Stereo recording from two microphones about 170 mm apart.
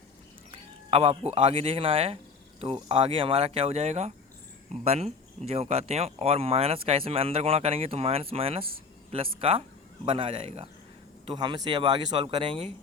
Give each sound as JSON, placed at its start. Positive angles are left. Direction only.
{"t": 0.5, "sound": "speech", "side_deg": -35}